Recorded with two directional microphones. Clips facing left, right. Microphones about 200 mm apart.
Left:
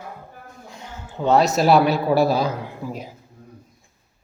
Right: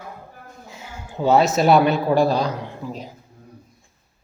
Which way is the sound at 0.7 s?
5° right (ahead or behind).